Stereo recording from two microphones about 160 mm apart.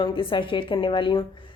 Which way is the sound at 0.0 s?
30° left (ahead or behind).